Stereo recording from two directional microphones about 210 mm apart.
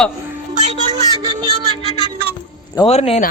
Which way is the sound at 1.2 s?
20° right (ahead or behind).